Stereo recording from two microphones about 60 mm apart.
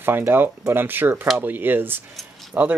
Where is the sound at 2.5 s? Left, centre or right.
Right.